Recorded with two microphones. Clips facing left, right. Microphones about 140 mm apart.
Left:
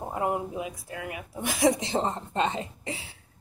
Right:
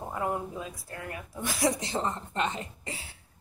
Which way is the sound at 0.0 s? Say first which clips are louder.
Left 3 dB; 20° left (ahead or behind).